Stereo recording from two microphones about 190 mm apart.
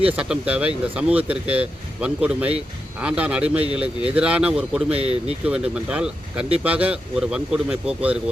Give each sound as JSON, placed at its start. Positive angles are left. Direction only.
{"t": 0.0, "sound": "speech", "side_deg": -5}
{"t": 4.9, "sound": "speech", "side_deg": -30}
{"t": 5.5, "sound": "speech", "side_deg": -5}